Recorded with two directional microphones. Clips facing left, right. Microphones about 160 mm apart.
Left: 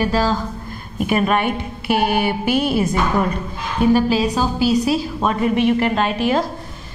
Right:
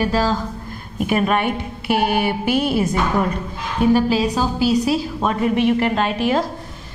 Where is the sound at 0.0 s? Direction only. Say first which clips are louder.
Left 1 dB; 5° left (ahead or behind).